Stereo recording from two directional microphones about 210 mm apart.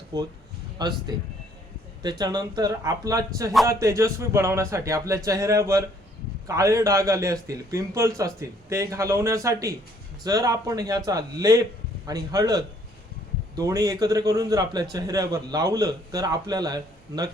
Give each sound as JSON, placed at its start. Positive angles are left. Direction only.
{"t": 0.1, "sound": "a man's voice", "side_deg": -20}